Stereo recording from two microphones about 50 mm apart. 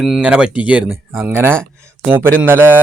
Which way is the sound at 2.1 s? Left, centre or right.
Right.